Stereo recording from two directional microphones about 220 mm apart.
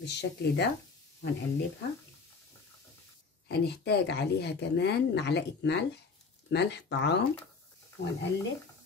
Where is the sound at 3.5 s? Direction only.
50° left (ahead or behind).